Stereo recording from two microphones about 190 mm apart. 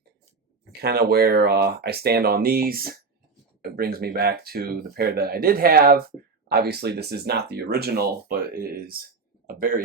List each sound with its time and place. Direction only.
0.8 s speech: 55° right (ahead or behind)